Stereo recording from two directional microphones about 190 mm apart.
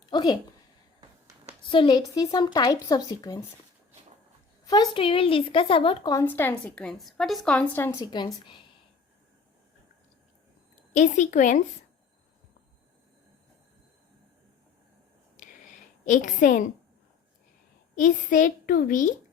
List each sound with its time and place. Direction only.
0.0 s a sound: 25° left (ahead or behind)
1.7 s speech: 25° left (ahead or behind)
4.6 s a woman's voice: 20° left (ahead or behind)
10.9 s a woman's voice: 40° left (ahead or behind)
16.0 s a child's voice: 40° left (ahead or behind)
17.9 s a child's voice: 40° left (ahead or behind)